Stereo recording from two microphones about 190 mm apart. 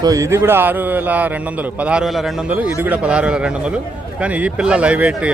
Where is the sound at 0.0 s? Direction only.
15° right (ahead or behind).